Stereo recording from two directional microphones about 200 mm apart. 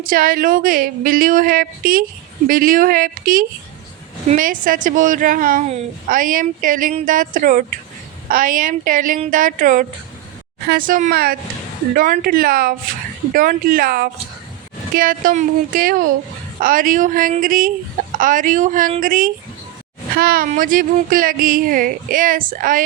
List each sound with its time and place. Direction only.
0.0 s a woman's voice: 45° right (ahead or behind)